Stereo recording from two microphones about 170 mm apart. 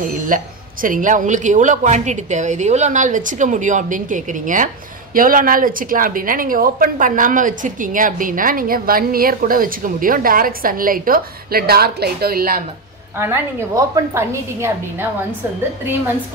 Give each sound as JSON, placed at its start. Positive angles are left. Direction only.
{"t": 0.3, "sound": "a woman's voice", "side_deg": -55}
{"t": 13.2, "sound": "a woman's voice", "side_deg": -15}